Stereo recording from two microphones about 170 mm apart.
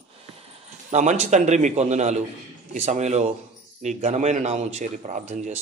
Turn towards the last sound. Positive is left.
turn(degrees=-40)  # may be behind; listen again after turning